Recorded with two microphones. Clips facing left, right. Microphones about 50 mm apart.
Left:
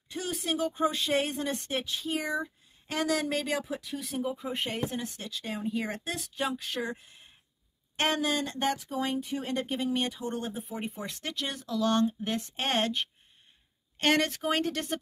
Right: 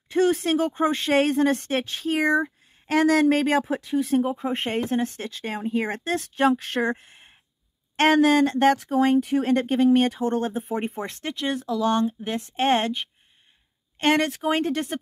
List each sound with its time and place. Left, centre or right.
0.1 s speech: right
3.8 s speech: right
4.2 s speech: right
7.9 s speech: right
11.2 s speech: right
12.4 s speech: right